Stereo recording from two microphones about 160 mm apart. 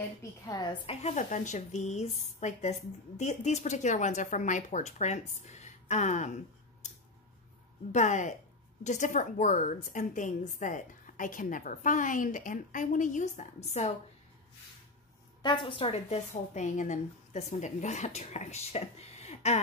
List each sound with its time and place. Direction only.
0.2 s a woman's voice: 25° left (ahead or behind)
1.0 s speech: 50° left (ahead or behind)
7.9 s speech: 50° left (ahead or behind)
15.4 s speech: 30° left (ahead or behind)